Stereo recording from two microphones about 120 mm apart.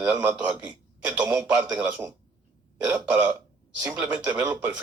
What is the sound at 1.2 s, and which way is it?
Speech, 30° right (ahead or behind).